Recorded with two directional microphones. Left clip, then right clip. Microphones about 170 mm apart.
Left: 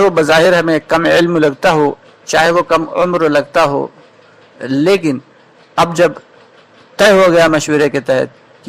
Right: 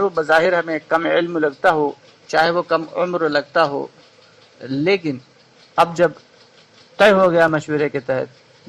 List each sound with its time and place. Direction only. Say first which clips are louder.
0.0 s a man's voice: left 7 dB; 30° left (ahead or behind)
1.2 s a man's voice: left 6 dB; 30° left (ahead or behind)
7.5 s a man's voice: left 8 dB; 20° left (ahead or behind)